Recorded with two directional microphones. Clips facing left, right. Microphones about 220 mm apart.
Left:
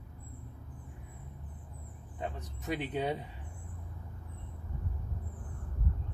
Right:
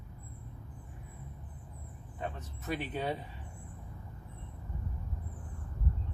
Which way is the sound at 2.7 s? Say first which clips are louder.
Left 2 dB; 15° left (ahead or behind).